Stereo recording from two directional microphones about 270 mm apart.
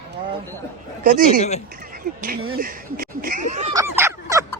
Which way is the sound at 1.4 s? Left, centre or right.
Left.